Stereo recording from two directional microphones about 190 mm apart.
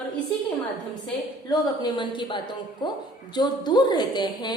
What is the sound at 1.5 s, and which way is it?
A woman's voice, 25° left (ahead or behind).